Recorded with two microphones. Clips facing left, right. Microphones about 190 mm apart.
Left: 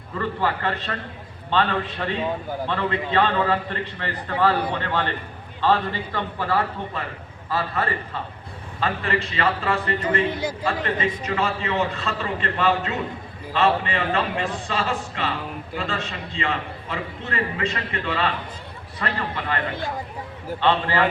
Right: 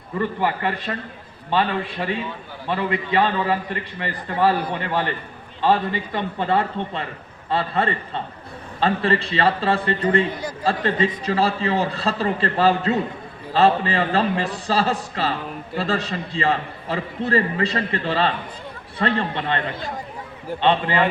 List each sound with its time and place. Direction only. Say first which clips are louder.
0.2 s a man's voice: right 2 dB; 15° right (ahead or behind)
20.6 s a man's voice: right 2 dB; 20° right (ahead or behind)